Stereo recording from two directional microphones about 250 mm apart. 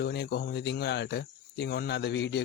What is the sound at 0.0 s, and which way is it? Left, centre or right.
Speech, left.